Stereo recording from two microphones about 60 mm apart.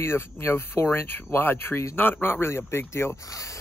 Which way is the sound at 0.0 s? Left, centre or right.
Left.